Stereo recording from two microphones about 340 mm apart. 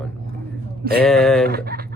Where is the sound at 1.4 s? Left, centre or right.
Right.